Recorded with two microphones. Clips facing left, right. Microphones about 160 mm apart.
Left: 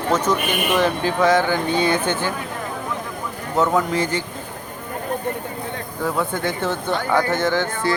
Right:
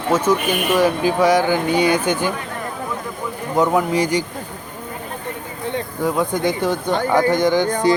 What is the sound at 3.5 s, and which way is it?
Speech, 15° right (ahead or behind).